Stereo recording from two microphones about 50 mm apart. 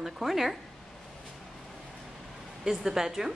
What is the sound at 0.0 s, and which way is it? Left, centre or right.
Speech, centre.